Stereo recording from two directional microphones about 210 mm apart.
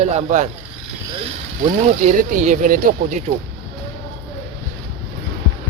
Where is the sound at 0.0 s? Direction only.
30° right (ahead or behind).